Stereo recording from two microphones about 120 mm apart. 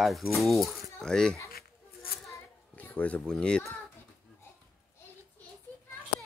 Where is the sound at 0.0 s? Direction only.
Centre (ahead or behind).